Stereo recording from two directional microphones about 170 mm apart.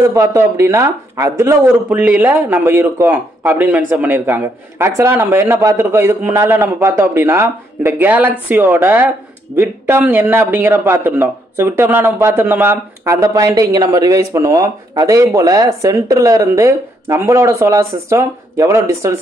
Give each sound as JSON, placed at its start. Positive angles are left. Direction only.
{"t": 0.1, "sound": "speech", "side_deg": -20}